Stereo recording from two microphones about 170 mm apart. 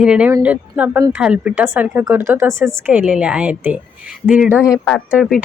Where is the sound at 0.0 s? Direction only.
5° right (ahead or behind).